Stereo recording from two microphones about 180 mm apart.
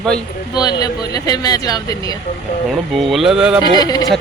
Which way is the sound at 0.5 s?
20° left (ahead or behind).